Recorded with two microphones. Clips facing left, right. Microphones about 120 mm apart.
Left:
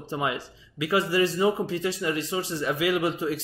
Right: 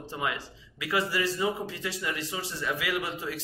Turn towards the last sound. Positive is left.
turn(degrees=25)  # may be behind; listen again after turning